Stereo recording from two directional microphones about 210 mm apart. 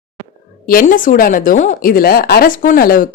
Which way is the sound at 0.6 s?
40° left (ahead or behind).